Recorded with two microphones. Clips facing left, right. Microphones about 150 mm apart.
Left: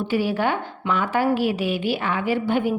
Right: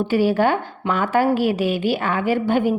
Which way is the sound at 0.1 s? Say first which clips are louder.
Right 4 dB; 45° right (ahead or behind).